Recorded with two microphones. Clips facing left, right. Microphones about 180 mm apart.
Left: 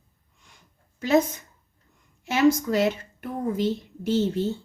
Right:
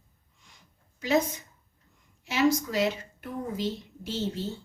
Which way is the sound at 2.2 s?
50° left (ahead or behind).